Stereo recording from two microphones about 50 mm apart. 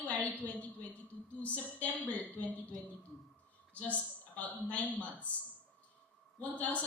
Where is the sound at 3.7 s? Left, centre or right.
Left.